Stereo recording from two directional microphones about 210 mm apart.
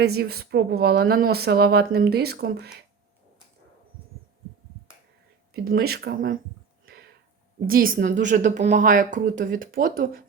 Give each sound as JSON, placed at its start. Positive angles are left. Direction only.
{"t": 0.0, "sound": "speech", "side_deg": -50}
{"t": 5.6, "sound": "speech", "side_deg": -45}
{"t": 7.7, "sound": "a woman's voice", "side_deg": -45}